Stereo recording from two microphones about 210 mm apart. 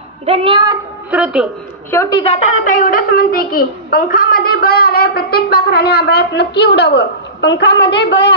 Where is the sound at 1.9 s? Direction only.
15° left (ahead or behind).